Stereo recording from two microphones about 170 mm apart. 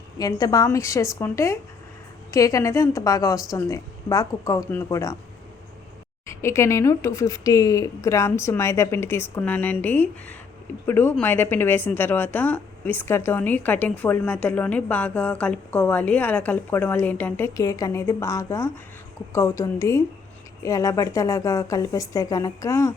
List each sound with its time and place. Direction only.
0.2 s a woman's voice: 20° left (ahead or behind)
6.2 s a woman's voice: 15° left (ahead or behind)